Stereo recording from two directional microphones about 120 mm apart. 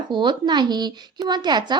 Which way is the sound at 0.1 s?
40° right (ahead or behind).